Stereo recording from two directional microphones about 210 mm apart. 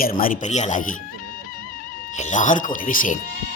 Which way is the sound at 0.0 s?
45° left (ahead or behind).